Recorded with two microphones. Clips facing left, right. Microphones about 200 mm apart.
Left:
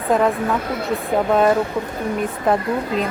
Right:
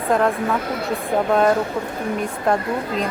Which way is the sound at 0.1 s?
Centre (ahead or behind).